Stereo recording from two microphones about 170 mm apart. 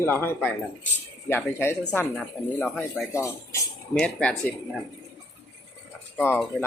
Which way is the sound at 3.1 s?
15° left (ahead or behind).